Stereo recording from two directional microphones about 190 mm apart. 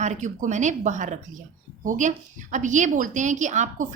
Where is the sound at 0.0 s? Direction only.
40° right (ahead or behind).